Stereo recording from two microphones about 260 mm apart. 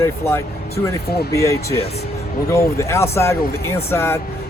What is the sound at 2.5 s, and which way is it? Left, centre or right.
Speech, centre.